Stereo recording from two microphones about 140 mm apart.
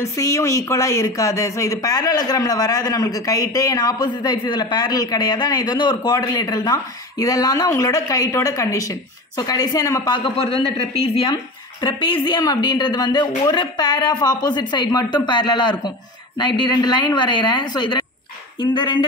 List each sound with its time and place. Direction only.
0.0 s speech: 20° left (ahead or behind)